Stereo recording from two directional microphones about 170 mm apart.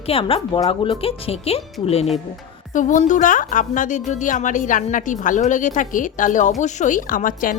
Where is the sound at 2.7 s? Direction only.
50° left (ahead or behind).